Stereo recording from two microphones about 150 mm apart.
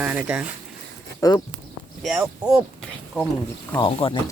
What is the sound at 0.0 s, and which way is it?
Speech, 10° right (ahead or behind).